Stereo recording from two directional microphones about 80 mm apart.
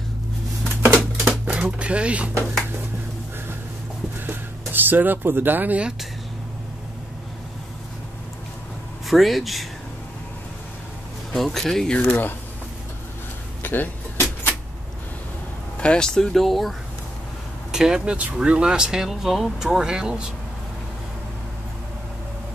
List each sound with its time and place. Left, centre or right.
1.2 s typewriter: centre
4.3 s speech: right
9.0 s speech: centre
11.3 s speech: centre
12.0 s speech: left
13.6 s vehicle: left
15.8 s speech: centre